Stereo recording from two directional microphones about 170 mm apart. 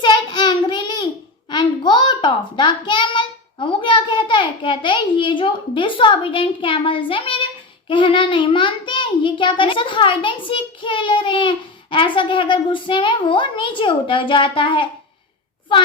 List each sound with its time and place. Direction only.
0.0 s child singing: 25° left (ahead or behind)
1.5 s a sound: 25° left (ahead or behind)
7.9 s a child's voice: 30° left (ahead or behind)